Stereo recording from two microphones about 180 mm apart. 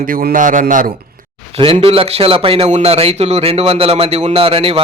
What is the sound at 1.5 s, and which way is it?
Speech, 30° right (ahead or behind).